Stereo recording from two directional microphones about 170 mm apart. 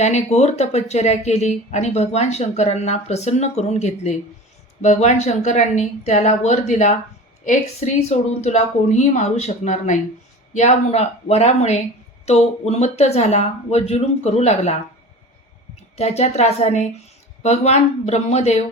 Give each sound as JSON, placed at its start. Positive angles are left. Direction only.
{"t": 0.0, "sound": "speech", "side_deg": 40}
{"t": 16.0, "sound": "speech", "side_deg": 40}